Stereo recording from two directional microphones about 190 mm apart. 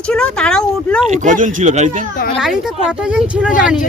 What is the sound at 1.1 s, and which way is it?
Speech, 40° right (ahead or behind).